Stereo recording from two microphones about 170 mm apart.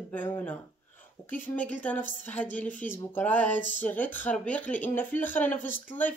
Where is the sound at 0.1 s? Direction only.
10° left (ahead or behind).